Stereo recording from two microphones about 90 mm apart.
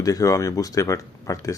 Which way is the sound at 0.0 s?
40° left (ahead or behind).